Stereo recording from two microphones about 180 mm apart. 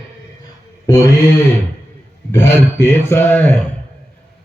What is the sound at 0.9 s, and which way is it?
A man's voice, 15° left (ahead or behind).